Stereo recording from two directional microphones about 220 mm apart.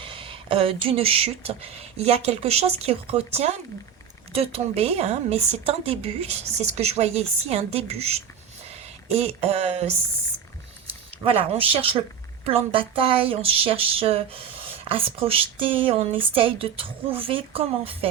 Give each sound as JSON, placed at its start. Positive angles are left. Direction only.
{"t": 0.0, "sound": "a woman's voice", "side_deg": -25}
{"t": 11.3, "sound": "a woman's voice", "side_deg": -25}